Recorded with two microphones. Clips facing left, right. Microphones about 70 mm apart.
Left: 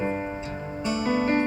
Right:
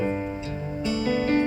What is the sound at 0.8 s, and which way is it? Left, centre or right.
Music, left.